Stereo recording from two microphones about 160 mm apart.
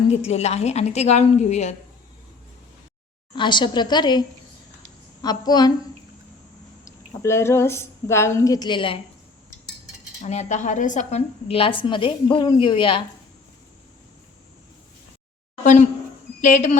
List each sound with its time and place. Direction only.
0.1 s a woman's voice: 40° left (ahead or behind)
3.3 s a woman's voice: 30° left (ahead or behind)
6.8 s a woman's voice: 15° left (ahead or behind)
10.2 s a woman's voice: 45° left (ahead or behind)
16.4 s a woman's voice: 50° left (ahead or behind)